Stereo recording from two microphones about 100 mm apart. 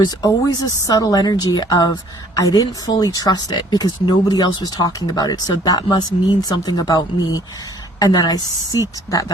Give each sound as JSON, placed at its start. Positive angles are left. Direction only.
{"t": 0.0, "sound": "speech", "side_deg": 45}